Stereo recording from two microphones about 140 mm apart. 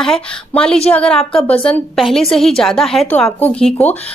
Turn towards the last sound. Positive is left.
turn(degrees=5)  # may be behind; listen again after turning